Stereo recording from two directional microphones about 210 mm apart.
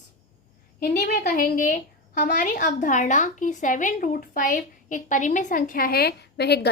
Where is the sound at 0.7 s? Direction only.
45° left (ahead or behind).